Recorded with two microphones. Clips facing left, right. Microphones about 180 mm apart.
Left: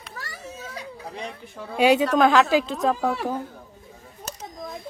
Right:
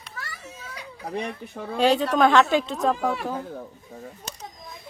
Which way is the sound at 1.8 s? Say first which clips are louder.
Left 2 dB; 10° left (ahead or behind).